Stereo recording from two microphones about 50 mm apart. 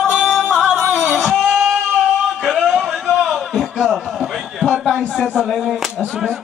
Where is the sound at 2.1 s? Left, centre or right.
Centre.